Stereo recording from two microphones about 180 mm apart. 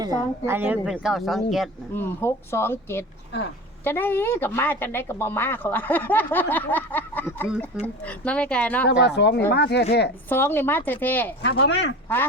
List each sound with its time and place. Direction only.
0.0 s speech: 15° right (ahead or behind); by 1.7 s centre (ahead or behind)
2.0 s speech: 15° left (ahead or behind)
8.9 s speech: 70° left (ahead or behind)
10.2 s speech: 10° left (ahead or behind)
11.4 s speech: 70° left (ahead or behind)